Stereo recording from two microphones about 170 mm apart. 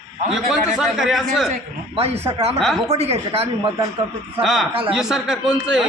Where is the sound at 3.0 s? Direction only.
35° right (ahead or behind).